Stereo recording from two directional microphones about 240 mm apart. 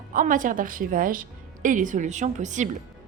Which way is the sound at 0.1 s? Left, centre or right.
Right.